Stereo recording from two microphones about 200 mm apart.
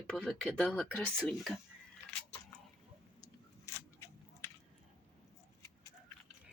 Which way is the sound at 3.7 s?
15° left (ahead or behind).